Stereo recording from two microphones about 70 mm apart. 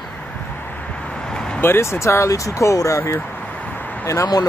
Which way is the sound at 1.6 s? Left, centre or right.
Left.